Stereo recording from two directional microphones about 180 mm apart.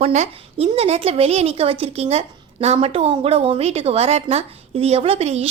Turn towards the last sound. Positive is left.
turn(degrees=-35)  # may be behind; listen again after turning